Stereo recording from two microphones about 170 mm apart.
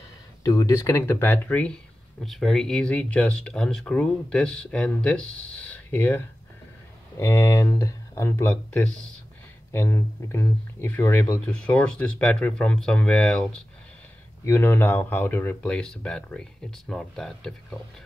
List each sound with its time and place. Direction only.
0.4 s speech: 20° left (ahead or behind); by 17.7 s centre (ahead or behind)